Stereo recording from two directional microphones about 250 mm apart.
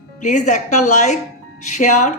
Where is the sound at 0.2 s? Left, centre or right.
Left.